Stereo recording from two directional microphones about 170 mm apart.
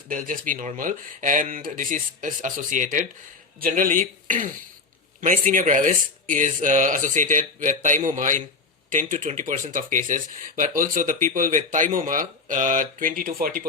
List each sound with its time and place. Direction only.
0.1 s speech: 50° right (ahead or behind)